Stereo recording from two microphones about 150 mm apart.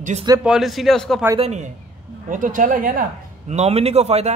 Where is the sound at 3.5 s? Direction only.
45° right (ahead or behind).